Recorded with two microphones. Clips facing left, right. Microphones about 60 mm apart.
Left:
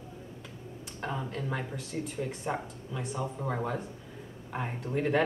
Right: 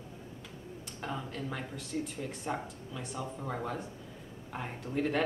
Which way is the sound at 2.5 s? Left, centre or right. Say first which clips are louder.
Left 2 dB; centre.